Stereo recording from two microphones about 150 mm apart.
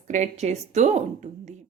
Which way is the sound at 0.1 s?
50° right (ahead or behind).